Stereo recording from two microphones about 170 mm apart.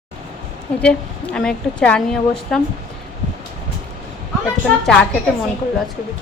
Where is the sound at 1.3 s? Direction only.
5° left (ahead or behind).